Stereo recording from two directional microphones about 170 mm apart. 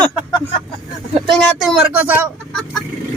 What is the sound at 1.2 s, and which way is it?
Speech, centre (ahead or behind).